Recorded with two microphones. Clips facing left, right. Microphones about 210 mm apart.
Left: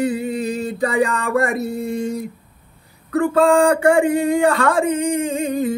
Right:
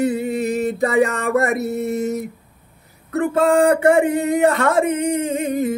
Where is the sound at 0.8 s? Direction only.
25° right (ahead or behind).